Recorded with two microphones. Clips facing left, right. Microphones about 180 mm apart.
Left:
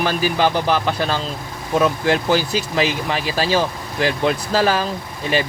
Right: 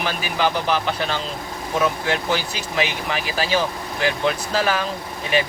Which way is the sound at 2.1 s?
35° left (ahead or behind).